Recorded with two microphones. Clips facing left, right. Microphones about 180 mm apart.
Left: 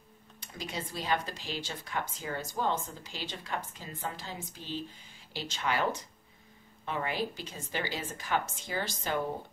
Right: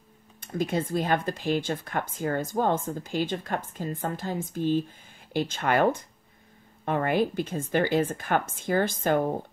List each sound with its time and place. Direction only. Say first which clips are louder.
0.4 s speech: right 12 dB; 50° right (ahead or behind)